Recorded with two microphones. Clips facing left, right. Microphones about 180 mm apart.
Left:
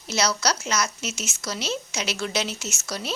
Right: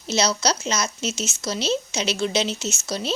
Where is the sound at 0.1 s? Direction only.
25° right (ahead or behind).